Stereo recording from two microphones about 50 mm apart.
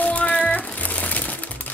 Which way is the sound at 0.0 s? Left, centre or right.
Left.